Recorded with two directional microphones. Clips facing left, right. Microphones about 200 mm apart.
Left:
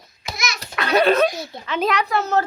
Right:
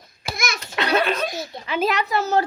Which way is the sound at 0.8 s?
25° right (ahead or behind).